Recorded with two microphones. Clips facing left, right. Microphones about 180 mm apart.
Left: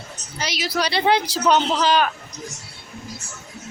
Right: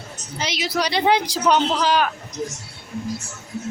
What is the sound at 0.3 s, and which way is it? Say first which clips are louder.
Speech: right 1 dB; 20° right (ahead or behind).